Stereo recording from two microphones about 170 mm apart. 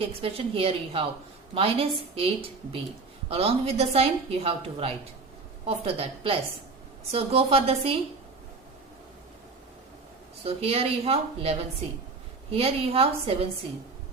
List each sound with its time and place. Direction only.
0.0 s a woman's voice: 35° right (ahead or behind)
10.4 s a woman's voice: 35° right (ahead or behind)